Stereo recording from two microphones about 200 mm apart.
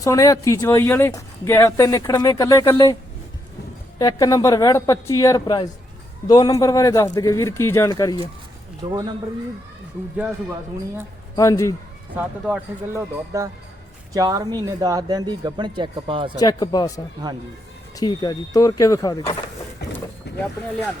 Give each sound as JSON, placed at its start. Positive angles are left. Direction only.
{"t": 0.0, "sound": "speech", "side_deg": 15}
{"t": 3.9, "sound": "speech", "side_deg": 15}
{"t": 8.8, "sound": "speech", "side_deg": -20}
{"t": 11.3, "sound": "speech", "side_deg": 15}
{"t": 12.1, "sound": "speech", "side_deg": -10}
{"t": 16.4, "sound": "speech", "side_deg": 20}
{"t": 17.2, "sound": "speech", "side_deg": -20}
{"t": 17.9, "sound": "speech", "side_deg": 20}
{"t": 20.3, "sound": "boat", "side_deg": 55}